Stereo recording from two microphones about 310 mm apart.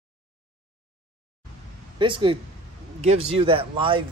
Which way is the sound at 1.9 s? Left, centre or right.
Centre.